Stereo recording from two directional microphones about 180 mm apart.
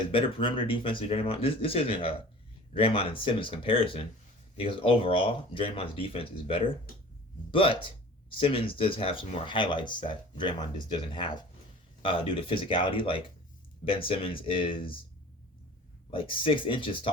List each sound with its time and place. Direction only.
0.1 s speech: 30° left (ahead or behind)
16.1 s speech: 30° left (ahead or behind)